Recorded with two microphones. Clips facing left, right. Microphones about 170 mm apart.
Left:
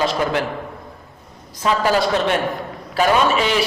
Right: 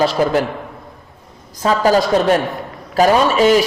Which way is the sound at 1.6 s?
40° right (ahead or behind).